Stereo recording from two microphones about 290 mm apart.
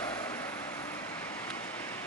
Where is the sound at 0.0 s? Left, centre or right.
Centre.